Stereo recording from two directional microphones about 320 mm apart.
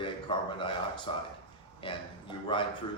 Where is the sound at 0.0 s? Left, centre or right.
Centre.